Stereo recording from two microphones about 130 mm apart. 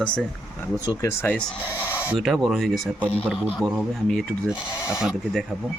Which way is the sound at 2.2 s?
Centre (ahead or behind).